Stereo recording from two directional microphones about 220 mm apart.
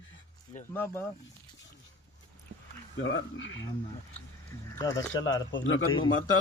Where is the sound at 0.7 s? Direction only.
10° left (ahead or behind).